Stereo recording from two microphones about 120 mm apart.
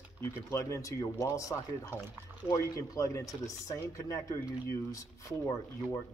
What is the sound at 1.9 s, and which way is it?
Speech, 20° right (ahead or behind).